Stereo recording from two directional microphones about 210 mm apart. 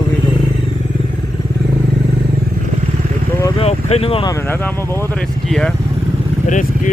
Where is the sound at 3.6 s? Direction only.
30° left (ahead or behind).